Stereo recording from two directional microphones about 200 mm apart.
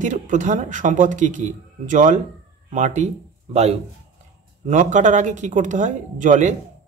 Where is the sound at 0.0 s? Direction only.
40° right (ahead or behind).